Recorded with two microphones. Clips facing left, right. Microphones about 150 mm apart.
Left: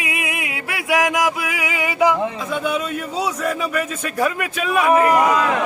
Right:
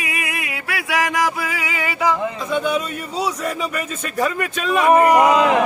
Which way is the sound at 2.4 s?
Centre (ahead or behind).